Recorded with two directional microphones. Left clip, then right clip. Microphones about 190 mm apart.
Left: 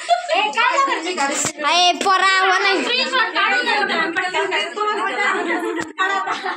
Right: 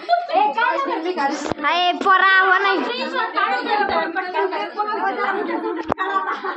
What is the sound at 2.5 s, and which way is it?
Speech, 20° left (ahead or behind).